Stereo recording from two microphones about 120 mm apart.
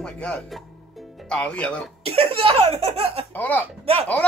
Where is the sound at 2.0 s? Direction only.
55° right (ahead or behind).